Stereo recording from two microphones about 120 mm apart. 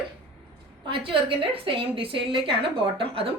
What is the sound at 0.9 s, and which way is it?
A woman's voice, 45° right (ahead or behind).